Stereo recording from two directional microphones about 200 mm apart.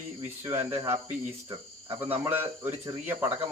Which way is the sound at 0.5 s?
30° right (ahead or behind).